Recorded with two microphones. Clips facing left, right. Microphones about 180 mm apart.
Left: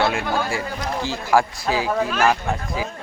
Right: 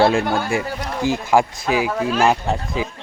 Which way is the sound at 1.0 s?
20° right (ahead or behind).